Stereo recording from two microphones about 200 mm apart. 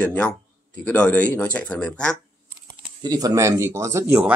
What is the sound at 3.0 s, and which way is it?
Speech, 20° right (ahead or behind).